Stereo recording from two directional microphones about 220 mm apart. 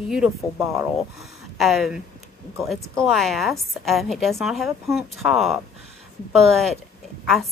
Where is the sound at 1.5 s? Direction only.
Centre (ahead or behind).